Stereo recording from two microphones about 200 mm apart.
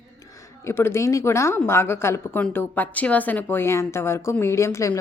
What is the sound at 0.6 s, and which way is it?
A woman's voice, 10° left (ahead or behind).